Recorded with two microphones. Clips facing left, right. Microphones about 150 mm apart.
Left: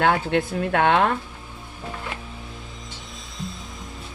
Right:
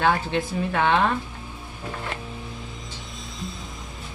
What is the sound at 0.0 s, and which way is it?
Speech, 60° left (ahead or behind).